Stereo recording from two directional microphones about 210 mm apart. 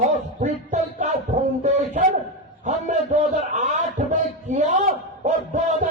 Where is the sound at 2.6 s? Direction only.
35° right (ahead or behind).